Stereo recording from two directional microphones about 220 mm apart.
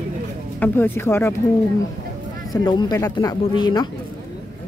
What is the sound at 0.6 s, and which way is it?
Speech, 10° left (ahead or behind).